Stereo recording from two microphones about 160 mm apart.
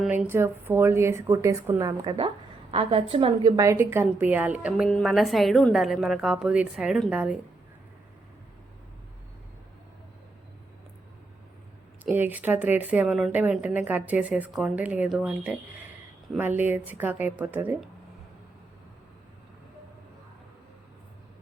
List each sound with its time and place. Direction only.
0.0 s a woman's voice: 10° right (ahead or behind)
2.7 s a woman's voice: 35° right (ahead or behind); by 4.9 s 10° right (ahead or behind)
4.9 s a woman's voice: 5° left (ahead or behind)
12.1 s a woman's voice: 10° right (ahead or behind)